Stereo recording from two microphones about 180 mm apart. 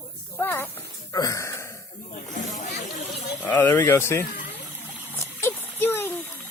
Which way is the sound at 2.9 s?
Centre (ahead or behind).